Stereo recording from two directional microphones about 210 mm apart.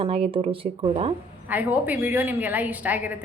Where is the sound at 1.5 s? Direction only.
10° right (ahead or behind).